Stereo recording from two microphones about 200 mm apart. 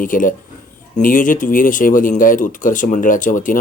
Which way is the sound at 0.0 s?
40° left (ahead or behind).